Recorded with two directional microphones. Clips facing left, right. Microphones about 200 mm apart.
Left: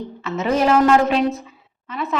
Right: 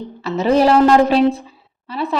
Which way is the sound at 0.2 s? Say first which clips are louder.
Right 5 dB; 35° right (ahead or behind).